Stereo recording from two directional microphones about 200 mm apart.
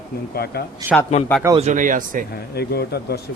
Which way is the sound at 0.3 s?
50° left (ahead or behind).